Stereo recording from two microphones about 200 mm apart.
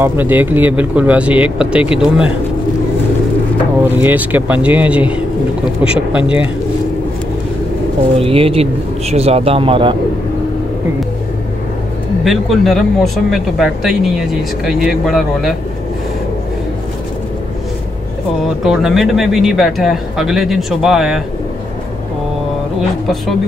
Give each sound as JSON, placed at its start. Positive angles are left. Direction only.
{"t": 0.0, "sound": "speech", "side_deg": -10}
{"t": 4.0, "sound": "speech", "side_deg": -10}
{"t": 8.2, "sound": "a man's voice", "side_deg": -30}
{"t": 12.3, "sound": "speech", "side_deg": 0}
{"t": 18.6, "sound": "speech", "side_deg": 0}